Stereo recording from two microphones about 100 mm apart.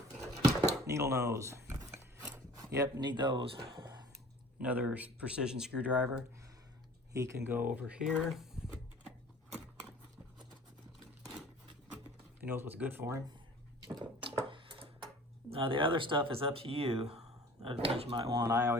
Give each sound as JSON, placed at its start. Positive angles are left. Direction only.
{"t": 0.2, "sound": "a sound", "side_deg": -30}
{"t": 3.0, "sound": "speech", "side_deg": -50}
{"t": 4.6, "sound": "speech", "side_deg": -15}
{"t": 7.1, "sound": "speech", "side_deg": -30}
{"t": 12.5, "sound": "speech", "side_deg": -20}
{"t": 13.8, "sound": "a sound", "side_deg": -45}
{"t": 15.5, "sound": "speech", "side_deg": -60}
{"t": 18.3, "sound": "speech", "side_deg": -40}